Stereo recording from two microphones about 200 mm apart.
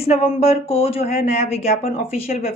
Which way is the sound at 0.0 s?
30° left (ahead or behind).